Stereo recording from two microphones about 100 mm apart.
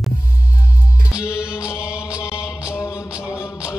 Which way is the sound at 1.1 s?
10° right (ahead or behind).